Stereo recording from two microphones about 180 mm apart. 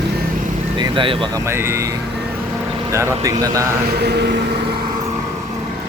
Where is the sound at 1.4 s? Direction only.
15° right (ahead or behind).